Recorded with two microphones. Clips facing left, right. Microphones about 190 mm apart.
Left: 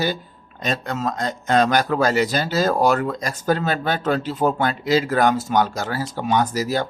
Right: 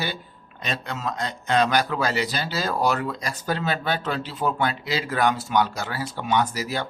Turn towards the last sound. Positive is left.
turn(degrees=40)  # may be behind; listen again after turning